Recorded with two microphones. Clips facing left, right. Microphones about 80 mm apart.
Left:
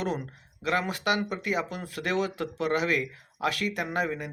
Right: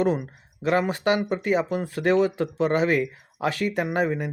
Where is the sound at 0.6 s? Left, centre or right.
Right.